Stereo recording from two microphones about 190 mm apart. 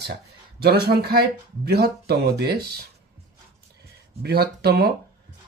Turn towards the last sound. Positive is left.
turn(degrees=-55)  # may be behind; listen again after turning